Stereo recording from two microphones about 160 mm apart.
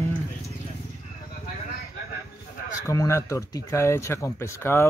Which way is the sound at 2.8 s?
20° left (ahead or behind).